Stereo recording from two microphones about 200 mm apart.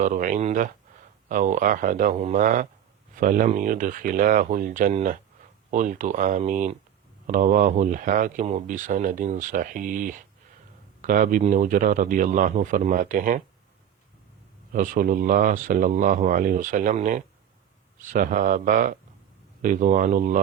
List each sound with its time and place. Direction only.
0.0 s speech: 40° right (ahead or behind)
14.7 s speech: 40° right (ahead or behind)